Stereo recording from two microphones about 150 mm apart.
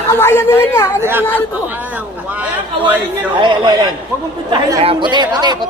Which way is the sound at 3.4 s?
30° right (ahead or behind).